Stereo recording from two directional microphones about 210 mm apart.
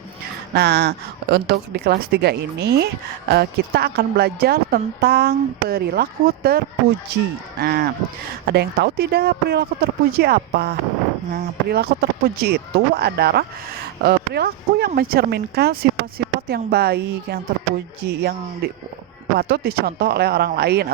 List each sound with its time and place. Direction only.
0.5 s speech: 50° right (ahead or behind)